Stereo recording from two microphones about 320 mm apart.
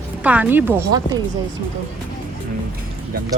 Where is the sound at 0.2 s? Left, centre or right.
Centre.